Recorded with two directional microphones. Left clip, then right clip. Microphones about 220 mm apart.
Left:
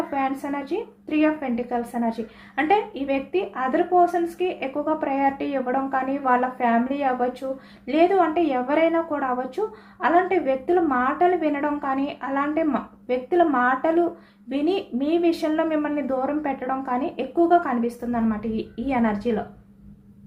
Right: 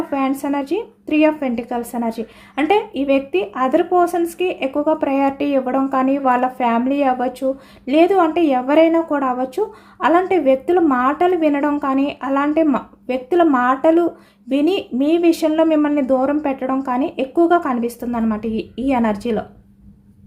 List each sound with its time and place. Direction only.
0.1 s a woman's voice: 55° right (ahead or behind)